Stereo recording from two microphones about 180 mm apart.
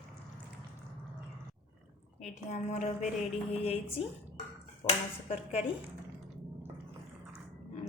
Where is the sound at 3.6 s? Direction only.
35° left (ahead or behind).